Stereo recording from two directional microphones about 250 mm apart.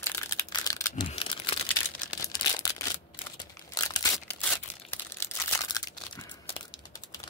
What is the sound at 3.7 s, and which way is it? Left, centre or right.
Crushing, centre.